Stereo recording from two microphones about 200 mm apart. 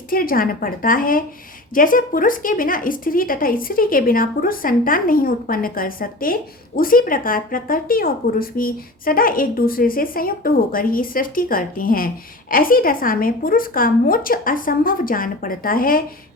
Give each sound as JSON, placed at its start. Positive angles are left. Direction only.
{"t": 0.1, "sound": "speech", "side_deg": 45}